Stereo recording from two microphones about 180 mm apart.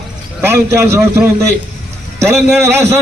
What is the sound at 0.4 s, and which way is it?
A man's voice, 15° right (ahead or behind).